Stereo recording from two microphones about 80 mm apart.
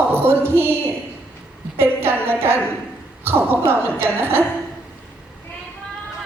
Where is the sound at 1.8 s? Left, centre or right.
Right.